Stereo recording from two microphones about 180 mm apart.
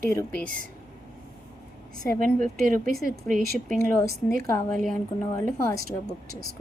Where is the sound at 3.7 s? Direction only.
10° left (ahead or behind).